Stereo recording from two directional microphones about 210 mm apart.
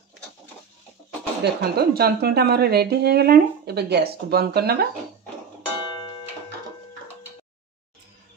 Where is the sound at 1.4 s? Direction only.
50° right (ahead or behind).